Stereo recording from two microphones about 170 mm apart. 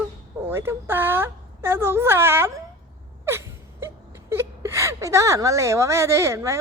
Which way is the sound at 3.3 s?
15° right (ahead or behind).